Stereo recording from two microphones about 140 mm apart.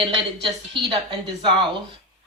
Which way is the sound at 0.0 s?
35° right (ahead or behind).